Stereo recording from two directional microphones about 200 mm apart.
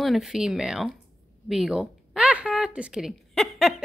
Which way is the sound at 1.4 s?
Centre (ahead or behind).